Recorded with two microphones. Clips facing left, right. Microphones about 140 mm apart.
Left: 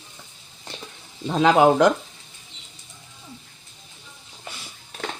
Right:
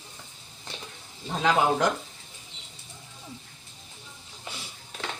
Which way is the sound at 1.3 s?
90° left.